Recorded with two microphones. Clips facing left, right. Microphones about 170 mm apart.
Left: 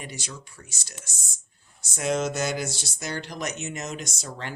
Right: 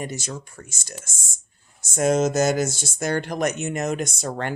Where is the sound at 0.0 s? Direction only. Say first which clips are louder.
Right 8 dB; 45° right (ahead or behind).